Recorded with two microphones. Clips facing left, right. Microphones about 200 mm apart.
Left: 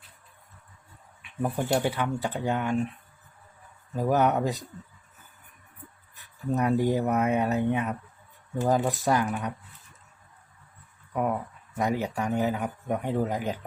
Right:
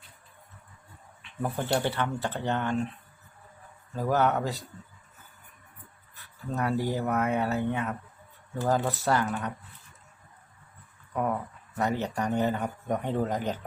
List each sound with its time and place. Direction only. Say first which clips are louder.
1.2 s a man's voice: left 3 dB; 15° left (ahead or behind)
3.9 s a man's voice: left 2 dB; 15° left (ahead or behind)
6.5 s a man's voice: left 4 dB; 20° left (ahead or behind)
11.1 s a sound: left 2 dB; 10° left (ahead or behind)
11.8 s a man's voice: left 1 dB; 10° left (ahead or behind)